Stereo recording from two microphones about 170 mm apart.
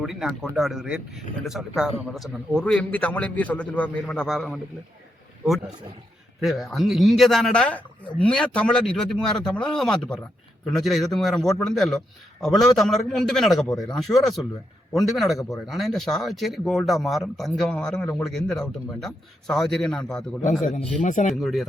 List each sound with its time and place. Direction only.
0.0 s a man's voice: centre (ahead or behind)
6.4 s a man's voice: centre (ahead or behind)
20.4 s speech: 50° left (ahead or behind)
21.3 s a man's voice: centre (ahead or behind)